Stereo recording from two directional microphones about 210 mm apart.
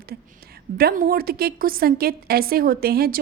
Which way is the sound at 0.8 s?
45° right (ahead or behind).